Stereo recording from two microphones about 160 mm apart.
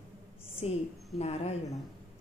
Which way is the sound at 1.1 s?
40° left (ahead or behind).